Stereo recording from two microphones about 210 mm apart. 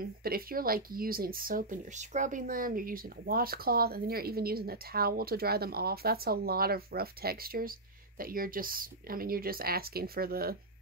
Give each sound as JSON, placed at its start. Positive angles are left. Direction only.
{"t": 0.0, "sound": "speech", "side_deg": -45}